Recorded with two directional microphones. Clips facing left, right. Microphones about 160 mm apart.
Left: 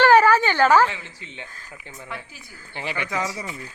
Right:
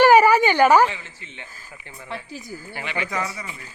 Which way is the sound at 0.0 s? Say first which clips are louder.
Right 2 dB; 10° right (ahead or behind).